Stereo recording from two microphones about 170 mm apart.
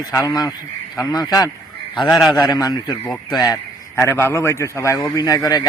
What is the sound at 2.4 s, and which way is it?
Speech, 25° left (ahead or behind).